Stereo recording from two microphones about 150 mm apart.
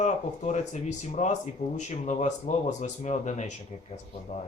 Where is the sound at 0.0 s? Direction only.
50° left (ahead or behind).